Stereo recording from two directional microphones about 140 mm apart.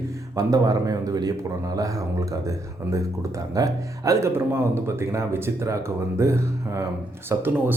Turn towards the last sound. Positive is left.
turn(degrees=-15)  # may be behind; listen again after turning